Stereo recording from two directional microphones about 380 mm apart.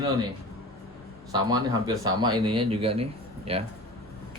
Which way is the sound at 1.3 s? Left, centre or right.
Centre.